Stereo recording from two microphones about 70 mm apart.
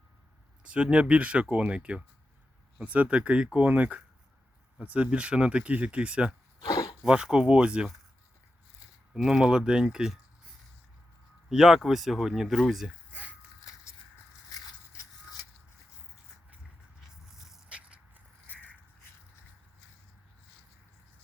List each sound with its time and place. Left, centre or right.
0.6 s speech: centre
6.7 s a sound: left
7.0 s speech: centre
9.1 s speech: centre
11.4 s speech: centre
17.7 s a sound: right